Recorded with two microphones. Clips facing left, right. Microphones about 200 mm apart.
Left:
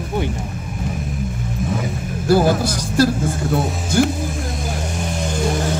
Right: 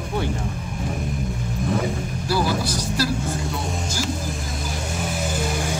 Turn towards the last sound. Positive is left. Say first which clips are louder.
# left 5 dB
turn(degrees=-5)  # may be behind; listen again after turning